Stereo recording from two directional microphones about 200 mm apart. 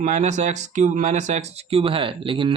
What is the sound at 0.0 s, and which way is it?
Speech, 35° right (ahead or behind).